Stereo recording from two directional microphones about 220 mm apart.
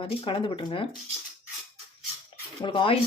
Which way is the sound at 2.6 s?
25° left (ahead or behind).